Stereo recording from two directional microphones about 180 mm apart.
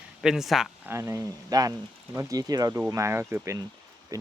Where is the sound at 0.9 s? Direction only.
15° right (ahead or behind).